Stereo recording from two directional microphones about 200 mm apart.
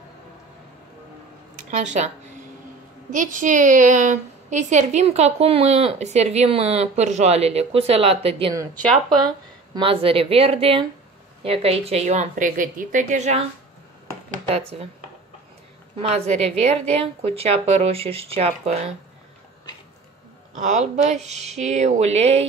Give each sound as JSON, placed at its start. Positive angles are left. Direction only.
{"t": 1.7, "sound": "a woman's voice", "side_deg": -35}
{"t": 3.1, "sound": "a woman's voice", "side_deg": -40}
{"t": 8.7, "sound": "speech", "side_deg": 0}
{"t": 9.8, "sound": "a woman's voice", "side_deg": -25}
{"t": 16.0, "sound": "a woman's voice", "side_deg": -30}
{"t": 20.5, "sound": "a woman's voice", "side_deg": -35}